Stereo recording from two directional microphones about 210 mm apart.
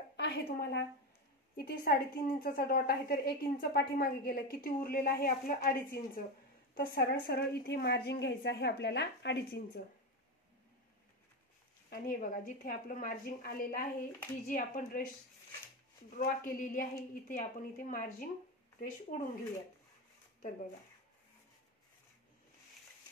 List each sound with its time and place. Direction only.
0.2 s a woman's voice: 50° left (ahead or behind)
11.9 s a woman's voice: 45° left (ahead or behind)
16.1 s a woman's voice: 40° left (ahead or behind)